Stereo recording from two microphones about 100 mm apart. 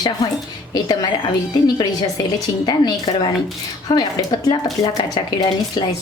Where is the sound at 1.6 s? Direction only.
45° left (ahead or behind).